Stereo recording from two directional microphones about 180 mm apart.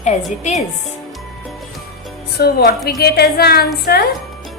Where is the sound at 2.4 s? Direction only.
60° left (ahead or behind).